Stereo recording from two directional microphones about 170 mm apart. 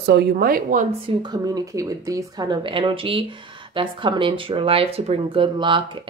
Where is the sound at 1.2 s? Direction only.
25° right (ahead or behind).